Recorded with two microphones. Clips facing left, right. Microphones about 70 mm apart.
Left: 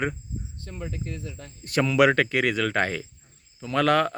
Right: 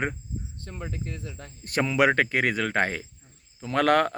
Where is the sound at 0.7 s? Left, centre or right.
Right.